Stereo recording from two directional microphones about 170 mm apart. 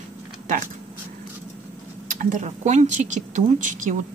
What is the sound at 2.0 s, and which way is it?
Speech, 45° right (ahead or behind).